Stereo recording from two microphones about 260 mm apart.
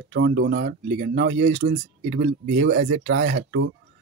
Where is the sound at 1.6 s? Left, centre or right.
Right.